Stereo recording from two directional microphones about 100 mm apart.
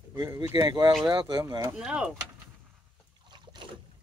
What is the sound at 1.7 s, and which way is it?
Speech, 10° right (ahead or behind).